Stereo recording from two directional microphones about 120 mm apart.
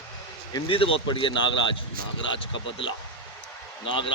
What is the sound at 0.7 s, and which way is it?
Speech, 50° left (ahead or behind).